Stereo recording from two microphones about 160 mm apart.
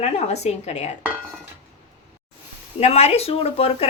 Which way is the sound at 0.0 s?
45° left (ahead or behind).